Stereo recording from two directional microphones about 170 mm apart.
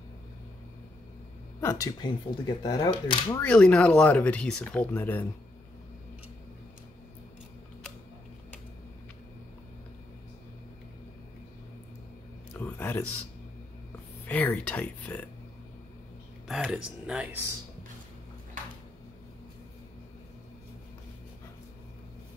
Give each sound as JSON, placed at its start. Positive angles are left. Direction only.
{"t": 1.6, "sound": "speech", "side_deg": 20}
{"t": 3.3, "sound": "speech", "side_deg": 10}
{"t": 12.5, "sound": "a sound", "side_deg": 10}
{"t": 14.2, "sound": "speech", "side_deg": 5}
{"t": 16.4, "sound": "speech", "side_deg": 0}